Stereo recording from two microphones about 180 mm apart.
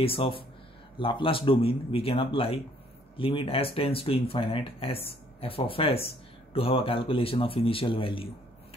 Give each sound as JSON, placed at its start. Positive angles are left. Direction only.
{"t": 0.0, "sound": "speech", "side_deg": 30}